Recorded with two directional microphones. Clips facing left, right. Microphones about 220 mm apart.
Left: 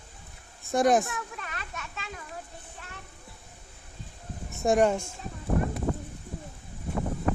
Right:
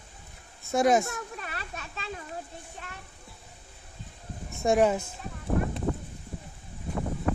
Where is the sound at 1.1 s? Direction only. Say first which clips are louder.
Right 1 dB; 35° right (ahead or behind).